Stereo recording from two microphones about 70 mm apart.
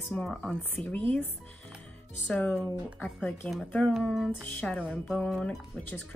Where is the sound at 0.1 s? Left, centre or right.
Left.